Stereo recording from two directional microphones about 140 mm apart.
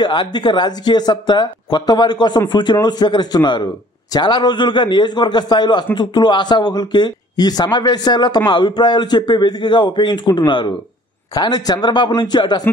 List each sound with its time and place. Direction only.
0.0 s speech: 35° left (ahead or behind)